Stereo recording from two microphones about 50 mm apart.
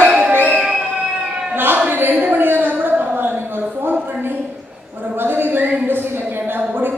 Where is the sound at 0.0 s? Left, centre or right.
Right.